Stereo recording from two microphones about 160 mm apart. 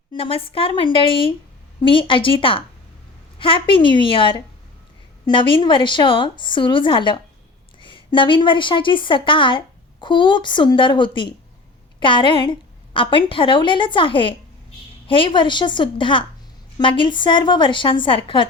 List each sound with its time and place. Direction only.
0.2 s a woman's voice: 35° left (ahead or behind)